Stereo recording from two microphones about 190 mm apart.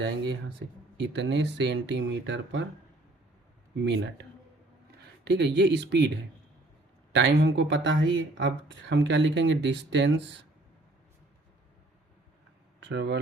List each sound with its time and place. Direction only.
0.9 s speech: 65° right (ahead or behind)
3.8 s speech: 65° right (ahead or behind)
7.1 s speech: 65° right (ahead or behind)
12.8 s speech: 65° right (ahead or behind)